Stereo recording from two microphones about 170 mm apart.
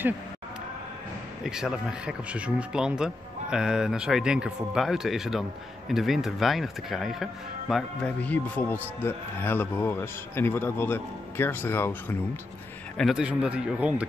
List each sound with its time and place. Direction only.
1.4 s speech: 5° right (ahead or behind); by 12.2 s 15° left (ahead or behind)
12.9 s speech: centre (ahead or behind)